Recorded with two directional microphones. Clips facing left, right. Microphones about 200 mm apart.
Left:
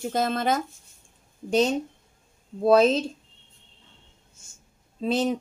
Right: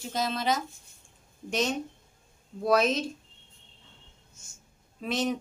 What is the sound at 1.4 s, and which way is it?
A woman's voice, 30° left (ahead or behind).